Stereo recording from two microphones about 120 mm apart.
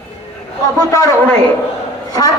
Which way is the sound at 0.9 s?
25° left (ahead or behind).